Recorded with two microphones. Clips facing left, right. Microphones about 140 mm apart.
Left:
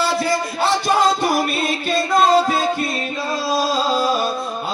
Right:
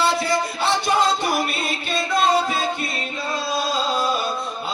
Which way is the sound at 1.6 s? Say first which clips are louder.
Left 5 dB; 50° left (ahead or behind).